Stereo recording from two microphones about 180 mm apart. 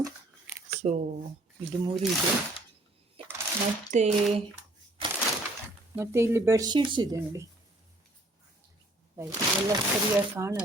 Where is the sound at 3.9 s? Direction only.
40° right (ahead or behind).